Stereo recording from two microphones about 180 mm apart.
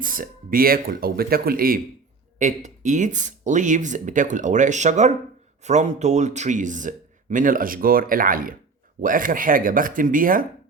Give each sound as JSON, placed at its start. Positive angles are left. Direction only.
{"t": 0.0, "sound": "speech", "side_deg": -50}
{"t": 2.6, "sound": "speech", "side_deg": -45}